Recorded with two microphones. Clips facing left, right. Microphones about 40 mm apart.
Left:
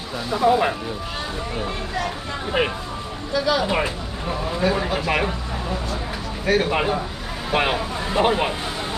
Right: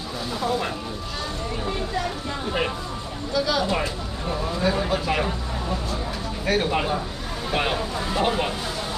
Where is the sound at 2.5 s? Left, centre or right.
Left.